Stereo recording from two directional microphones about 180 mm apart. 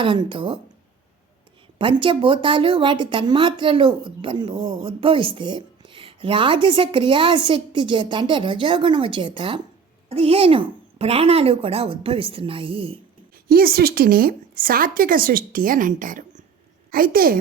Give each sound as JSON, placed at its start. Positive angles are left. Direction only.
{"t": 0.0, "sound": "speech", "side_deg": -25}
{"t": 1.8, "sound": "speech", "side_deg": -30}
{"t": 13.3, "sound": "a woman's voice", "side_deg": -55}